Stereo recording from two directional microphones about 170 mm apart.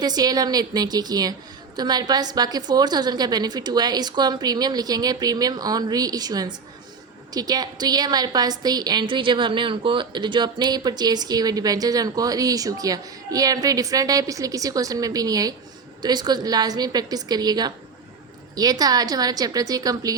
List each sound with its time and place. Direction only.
0.0 s a woman's voice: 20° right (ahead or behind)